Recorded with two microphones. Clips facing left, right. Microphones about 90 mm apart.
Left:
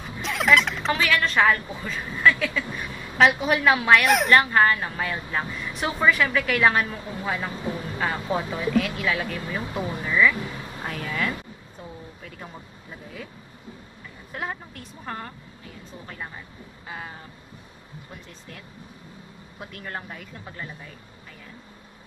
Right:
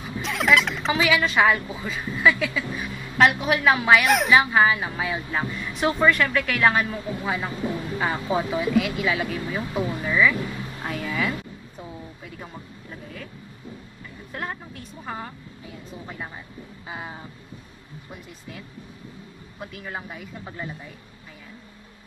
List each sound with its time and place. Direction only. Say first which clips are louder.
0.2 s a woman's voice: even; centre (ahead or behind)
14.3 s speech: even; centre (ahead or behind)
16.8 s vehicle: right 1 dB; 15° right (ahead or behind)
19.6 s speech: right 1 dB; centre (ahead or behind)